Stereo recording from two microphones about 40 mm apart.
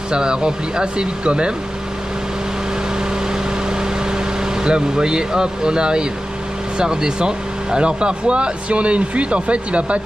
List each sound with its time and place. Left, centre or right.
0.1 s speech: right
4.1 s speech: centre